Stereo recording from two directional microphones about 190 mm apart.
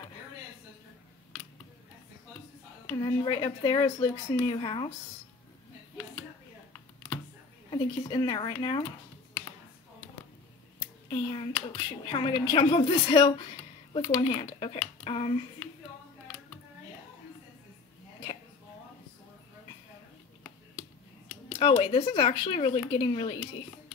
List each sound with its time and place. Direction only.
3.0 s speech: 25° left (ahead or behind)
7.7 s speech: 25° left (ahead or behind)
11.1 s speech: 25° left (ahead or behind)
15.0 s hands: 30° left (ahead or behind)
21.5 s speech: 30° left (ahead or behind)